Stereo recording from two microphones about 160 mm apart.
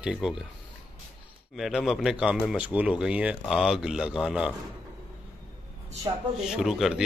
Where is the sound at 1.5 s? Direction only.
Centre (ahead or behind).